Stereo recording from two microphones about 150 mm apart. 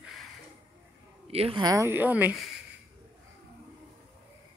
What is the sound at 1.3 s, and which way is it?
Speech, 40° right (ahead or behind).